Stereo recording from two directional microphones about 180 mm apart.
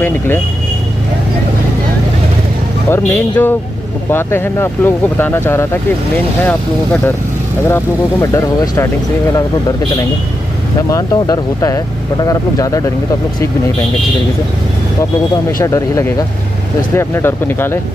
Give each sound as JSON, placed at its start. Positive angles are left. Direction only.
{"t": 2.9, "sound": "speech", "side_deg": 10}
{"t": 15.6, "sound": "speech", "side_deg": 20}